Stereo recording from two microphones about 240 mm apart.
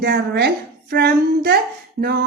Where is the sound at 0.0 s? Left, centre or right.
Right.